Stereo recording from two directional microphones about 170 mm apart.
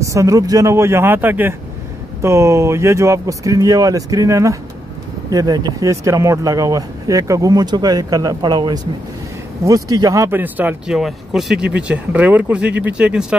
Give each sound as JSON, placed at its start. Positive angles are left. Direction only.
{"t": 0.0, "sound": "speech", "side_deg": -20}
{"t": 9.8, "sound": "speech", "side_deg": -20}